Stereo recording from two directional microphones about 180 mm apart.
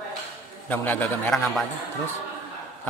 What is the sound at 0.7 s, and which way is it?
A man's voice, 10° left (ahead or behind).